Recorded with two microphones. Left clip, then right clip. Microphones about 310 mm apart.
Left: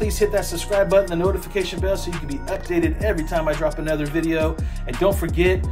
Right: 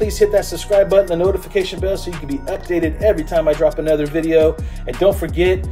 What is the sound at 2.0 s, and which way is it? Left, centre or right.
Speech, centre.